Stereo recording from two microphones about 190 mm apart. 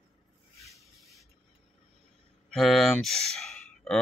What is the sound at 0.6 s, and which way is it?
Rub, centre (ahead or behind).